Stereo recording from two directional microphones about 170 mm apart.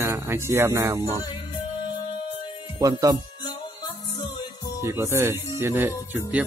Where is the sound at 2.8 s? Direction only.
20° right (ahead or behind).